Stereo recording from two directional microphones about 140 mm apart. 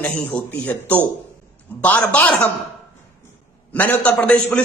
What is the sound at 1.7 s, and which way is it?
Speech, 10° left (ahead or behind).